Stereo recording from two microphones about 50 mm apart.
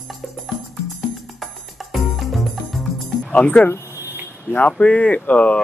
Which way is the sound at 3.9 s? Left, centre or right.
Right.